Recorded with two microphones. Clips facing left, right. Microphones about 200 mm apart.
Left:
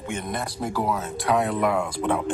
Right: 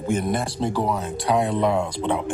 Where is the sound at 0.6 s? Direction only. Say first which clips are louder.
Even; 20° right (ahead or behind).